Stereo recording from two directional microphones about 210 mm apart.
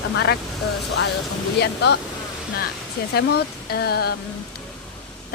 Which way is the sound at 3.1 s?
50° left (ahead or behind).